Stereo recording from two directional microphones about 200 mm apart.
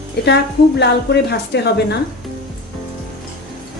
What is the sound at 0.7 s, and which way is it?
A woman's voice, 55° left (ahead or behind).